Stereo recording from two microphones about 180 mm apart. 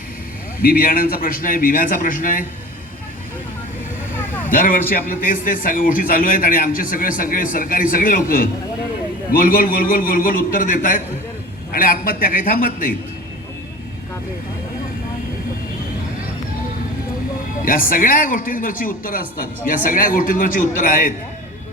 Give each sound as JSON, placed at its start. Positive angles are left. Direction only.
{"t": 0.6, "sound": "speech", "side_deg": 55}
{"t": 4.4, "sound": "speech", "side_deg": 50}
{"t": 17.7, "sound": "speech", "side_deg": 50}